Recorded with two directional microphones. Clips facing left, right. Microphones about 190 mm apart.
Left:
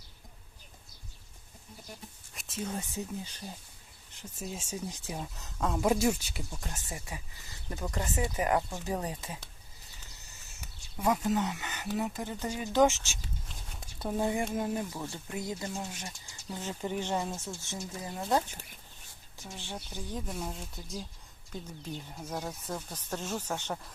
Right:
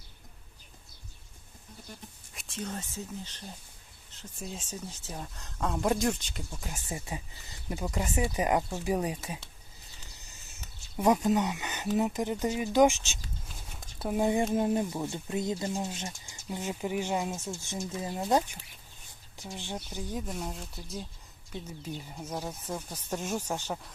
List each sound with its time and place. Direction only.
2.3 s speech: centre (ahead or behind)
6.7 s speech: 25° right (ahead or behind)
7.8 s speech: 10° right (ahead or behind)
10.9 s speech: 20° right (ahead or behind)
13.5 s speech: 5° right (ahead or behind)
19.5 s speech: 15° right (ahead or behind)
20.2 s speech: centre (ahead or behind)